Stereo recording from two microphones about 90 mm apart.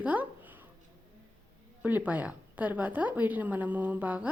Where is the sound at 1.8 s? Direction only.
20° right (ahead or behind).